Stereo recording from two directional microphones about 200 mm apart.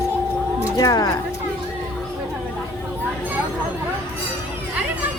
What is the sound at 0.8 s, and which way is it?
Speech, 15° left (ahead or behind).